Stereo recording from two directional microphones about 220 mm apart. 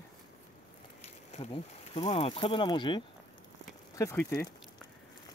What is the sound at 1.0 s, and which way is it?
Speech, 30° left (ahead or behind).